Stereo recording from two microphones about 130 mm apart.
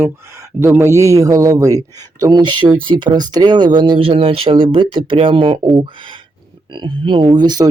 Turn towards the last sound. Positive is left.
turn(degrees=-30)  # may be behind; listen again after turning